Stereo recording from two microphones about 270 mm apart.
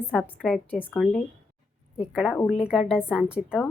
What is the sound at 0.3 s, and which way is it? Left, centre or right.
Speech, centre.